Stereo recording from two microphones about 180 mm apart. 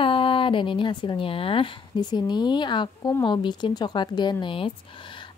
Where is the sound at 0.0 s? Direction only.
30° left (ahead or behind).